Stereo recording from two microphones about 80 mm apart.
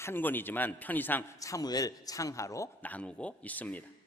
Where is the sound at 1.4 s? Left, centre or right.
Left.